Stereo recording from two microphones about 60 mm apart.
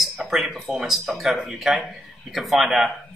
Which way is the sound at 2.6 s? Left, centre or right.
Centre.